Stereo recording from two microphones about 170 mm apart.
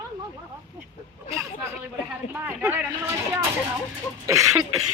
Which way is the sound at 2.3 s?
10° right (ahead or behind).